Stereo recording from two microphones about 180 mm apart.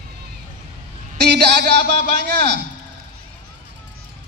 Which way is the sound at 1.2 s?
65° right (ahead or behind).